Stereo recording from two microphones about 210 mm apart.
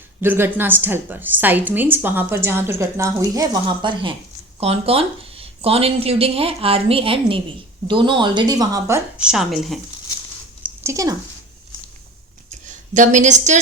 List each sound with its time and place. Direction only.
0.2 s a woman's voice: 10° right (ahead or behind)
9.1 s a woman's voice: 5° right (ahead or behind)
10.8 s speech: 15° right (ahead or behind)
12.6 s a woman's voice: 35° right (ahead or behind)